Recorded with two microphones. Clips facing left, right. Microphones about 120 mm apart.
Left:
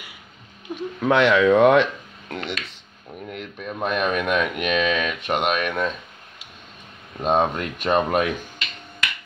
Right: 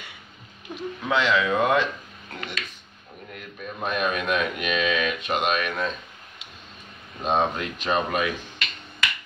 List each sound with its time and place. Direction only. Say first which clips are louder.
0.7 s speech: left 5 dB; 10° left (ahead or behind)
1.0 s speech: left 7 dB; 60° left (ahead or behind)
7.2 s speech: left 3 dB; 55° left (ahead or behind)